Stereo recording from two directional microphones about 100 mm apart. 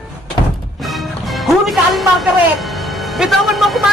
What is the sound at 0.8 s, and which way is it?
Music, centre (ahead or behind).